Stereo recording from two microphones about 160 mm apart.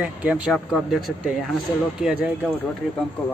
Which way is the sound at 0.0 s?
10° right (ahead or behind).